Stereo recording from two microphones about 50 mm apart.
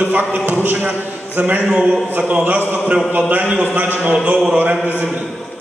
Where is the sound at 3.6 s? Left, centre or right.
Right.